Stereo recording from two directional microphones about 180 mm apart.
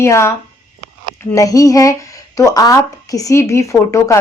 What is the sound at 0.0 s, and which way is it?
Speech, 15° left (ahead or behind).